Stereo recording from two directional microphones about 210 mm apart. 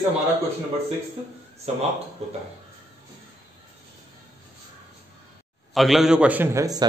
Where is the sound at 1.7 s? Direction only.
30° right (ahead or behind).